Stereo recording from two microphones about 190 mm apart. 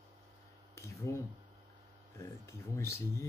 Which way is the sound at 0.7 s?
15° left (ahead or behind).